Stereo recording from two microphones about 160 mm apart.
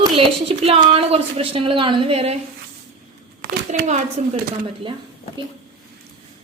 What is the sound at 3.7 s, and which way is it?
Speech, 45° right (ahead or behind).